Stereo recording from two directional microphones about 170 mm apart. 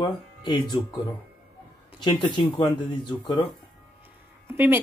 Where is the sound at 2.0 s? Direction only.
25° left (ahead or behind).